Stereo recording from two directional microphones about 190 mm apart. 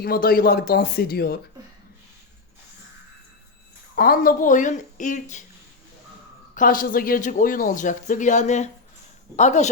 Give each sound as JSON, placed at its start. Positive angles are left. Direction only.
{"t": 0.0, "sound": "speech", "side_deg": 50}
{"t": 3.9, "sound": "speech", "side_deg": 50}
{"t": 6.5, "sound": "speech", "side_deg": 45}